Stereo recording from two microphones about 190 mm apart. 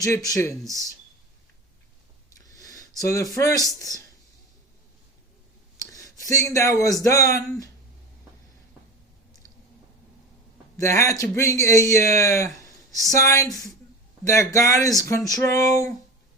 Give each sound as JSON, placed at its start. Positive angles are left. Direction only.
{"t": 0.0, "sound": "speech", "side_deg": 15}
{"t": 2.4, "sound": "a sound", "side_deg": 20}
{"t": 3.8, "sound": "speech", "side_deg": 20}
{"t": 5.8, "sound": "speech", "side_deg": 15}
{"t": 10.8, "sound": "speech", "side_deg": 15}
{"t": 12.5, "sound": "a sound", "side_deg": 15}
{"t": 13.1, "sound": "speech", "side_deg": 15}